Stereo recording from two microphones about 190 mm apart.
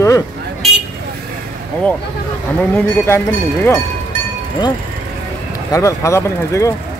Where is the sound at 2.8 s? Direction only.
10° left (ahead or behind).